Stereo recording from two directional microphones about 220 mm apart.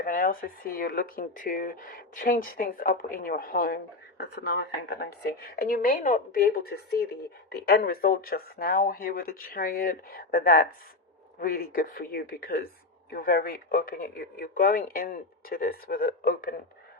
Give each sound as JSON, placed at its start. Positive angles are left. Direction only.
{"t": 0.0, "sound": "speech", "side_deg": 40}